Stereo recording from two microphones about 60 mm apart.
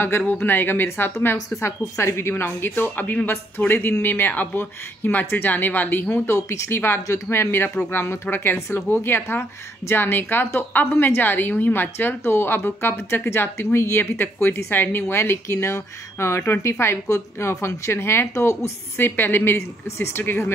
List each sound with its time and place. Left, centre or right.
0.4 s a woman's voice: left
2.0 s a woman's voice: left
6.2 s speech: left
9.0 s a woman's voice: left
15.4 s a woman's voice: left
18.9 s a woman's voice: left